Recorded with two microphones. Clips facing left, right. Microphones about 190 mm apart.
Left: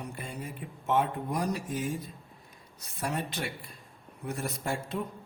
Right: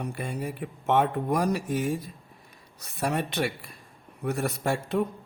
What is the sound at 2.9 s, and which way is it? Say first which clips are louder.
Speech: right 6 dB; 70° right (ahead or behind).